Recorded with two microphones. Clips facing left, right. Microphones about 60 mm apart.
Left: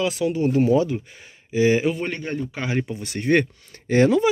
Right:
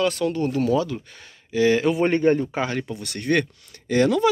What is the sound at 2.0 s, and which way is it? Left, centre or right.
Speech, right.